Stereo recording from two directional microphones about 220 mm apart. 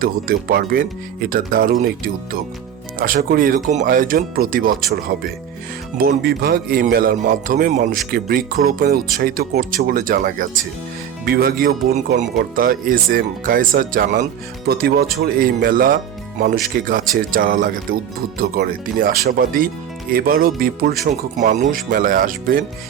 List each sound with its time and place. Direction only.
0.0 s a man's voice: 40° right (ahead or behind)
3.0 s a man's voice: 40° right (ahead or behind)
6.0 s a man's voice: 45° right (ahead or behind)